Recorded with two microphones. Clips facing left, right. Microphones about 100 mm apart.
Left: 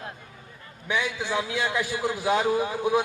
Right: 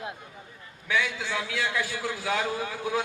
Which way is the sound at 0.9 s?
20° left (ahead or behind).